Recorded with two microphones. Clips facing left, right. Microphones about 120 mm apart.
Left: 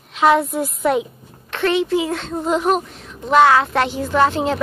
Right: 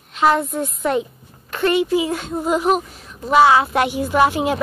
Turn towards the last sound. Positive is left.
turn(degrees=-10)  # may be behind; listen again after turning